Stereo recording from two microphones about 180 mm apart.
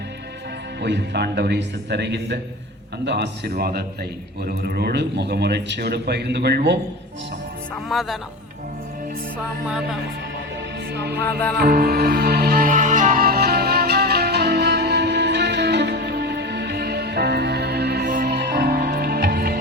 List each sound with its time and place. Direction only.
0.8 s a man's voice: 70° right (ahead or behind)
7.9 s speech: centre (ahead or behind)
10.9 s a man's voice: 65° right (ahead or behind)
11.5 s music: 60° right (ahead or behind)